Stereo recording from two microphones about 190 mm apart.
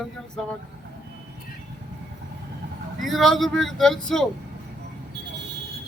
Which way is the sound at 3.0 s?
Centre (ahead or behind).